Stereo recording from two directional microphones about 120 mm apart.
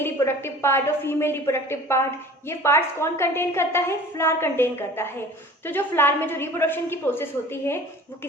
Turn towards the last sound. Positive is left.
turn(degrees=20)  # may be behind; listen again after turning